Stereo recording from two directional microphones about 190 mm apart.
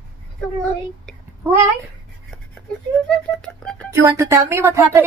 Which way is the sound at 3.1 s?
5° left (ahead or behind).